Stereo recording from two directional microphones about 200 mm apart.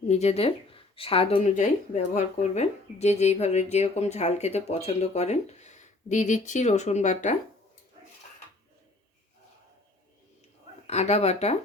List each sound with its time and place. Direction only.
0.1 s speech: 30° left (ahead or behind)
10.8 s speech: 35° left (ahead or behind)